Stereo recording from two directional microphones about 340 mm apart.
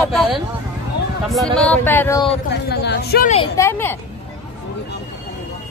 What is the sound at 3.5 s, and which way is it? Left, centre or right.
Speech, centre.